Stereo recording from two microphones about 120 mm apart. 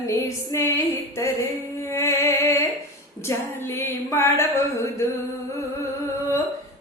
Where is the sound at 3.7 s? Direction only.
20° left (ahead or behind).